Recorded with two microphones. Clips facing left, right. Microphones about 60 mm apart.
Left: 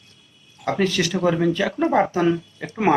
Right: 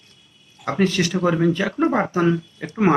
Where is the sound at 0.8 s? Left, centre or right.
Right.